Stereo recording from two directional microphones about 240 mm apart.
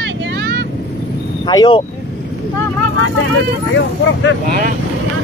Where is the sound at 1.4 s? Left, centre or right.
Centre.